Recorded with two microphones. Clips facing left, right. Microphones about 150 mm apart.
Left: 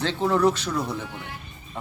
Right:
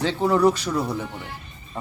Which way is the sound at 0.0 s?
5° right (ahead or behind).